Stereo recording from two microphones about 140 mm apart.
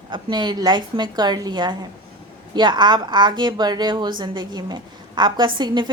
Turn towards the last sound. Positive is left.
turn(degrees=-35)  # may be behind; listen again after turning